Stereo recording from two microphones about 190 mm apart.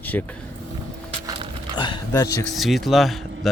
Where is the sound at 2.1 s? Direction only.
15° left (ahead or behind).